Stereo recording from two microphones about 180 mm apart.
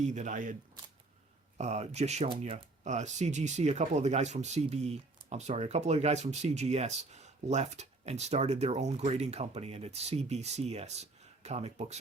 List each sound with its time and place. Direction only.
0.0 s speech: 40° right (ahead or behind)
1.5 s speech: 40° right (ahead or behind)